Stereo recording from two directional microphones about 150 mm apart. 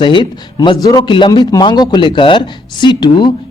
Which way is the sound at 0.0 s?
30° left (ahead or behind).